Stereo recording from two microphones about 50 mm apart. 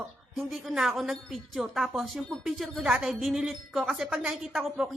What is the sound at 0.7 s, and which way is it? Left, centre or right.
Speech, centre.